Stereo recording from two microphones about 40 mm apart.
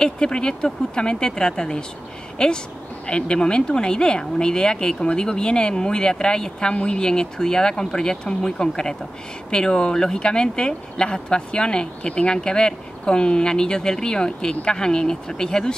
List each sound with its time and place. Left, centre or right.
0.0 s a woman's voice: left